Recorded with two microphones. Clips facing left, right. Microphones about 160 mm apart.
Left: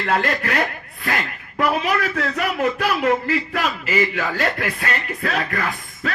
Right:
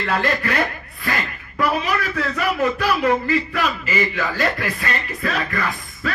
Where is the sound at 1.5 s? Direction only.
65° left (ahead or behind).